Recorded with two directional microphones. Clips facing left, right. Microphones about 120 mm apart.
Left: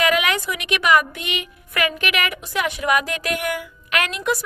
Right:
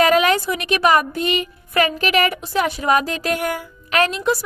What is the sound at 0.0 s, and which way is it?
A woman's voice, 35° right (ahead or behind).